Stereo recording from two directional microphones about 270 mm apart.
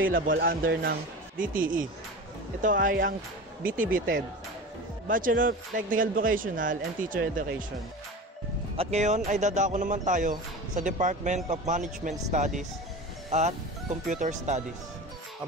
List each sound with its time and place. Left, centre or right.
0.3 s speech: right
8.7 s speech: right